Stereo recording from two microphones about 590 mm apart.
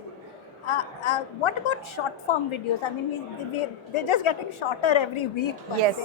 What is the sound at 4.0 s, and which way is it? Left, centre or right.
A woman's voice, left.